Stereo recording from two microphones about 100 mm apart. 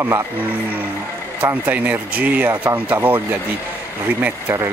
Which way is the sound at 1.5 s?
15° right (ahead or behind).